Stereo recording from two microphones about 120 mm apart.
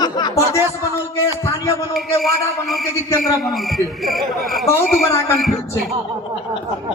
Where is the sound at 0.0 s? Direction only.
35° left (ahead or behind).